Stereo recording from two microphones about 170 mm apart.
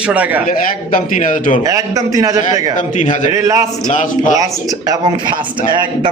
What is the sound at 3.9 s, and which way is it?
Speech, 45° left (ahead or behind).